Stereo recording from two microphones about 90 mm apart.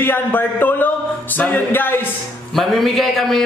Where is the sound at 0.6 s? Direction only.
20° left (ahead or behind).